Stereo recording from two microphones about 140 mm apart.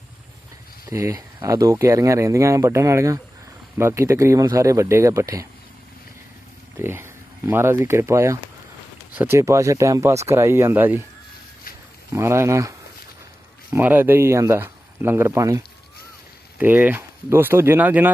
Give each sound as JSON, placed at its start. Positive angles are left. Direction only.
{"t": 0.9, "sound": "speech", "side_deg": -20}
{"t": 6.7, "sound": "speech", "side_deg": -15}
{"t": 12.1, "sound": "speech", "side_deg": -20}
{"t": 13.7, "sound": "speech", "side_deg": -15}